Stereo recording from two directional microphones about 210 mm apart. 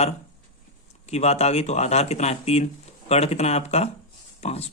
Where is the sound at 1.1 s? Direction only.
30° left (ahead or behind).